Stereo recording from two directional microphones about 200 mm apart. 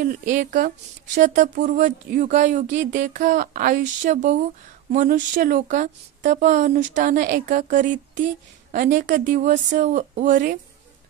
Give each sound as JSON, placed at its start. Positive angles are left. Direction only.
{"t": 0.0, "sound": "speech", "side_deg": -40}